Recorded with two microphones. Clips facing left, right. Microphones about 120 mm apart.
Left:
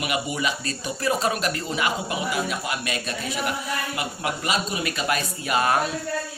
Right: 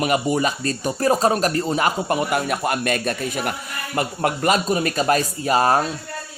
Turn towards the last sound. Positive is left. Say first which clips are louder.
# right 5 dB
turn(degrees=-35)  # may be behind; listen again after turning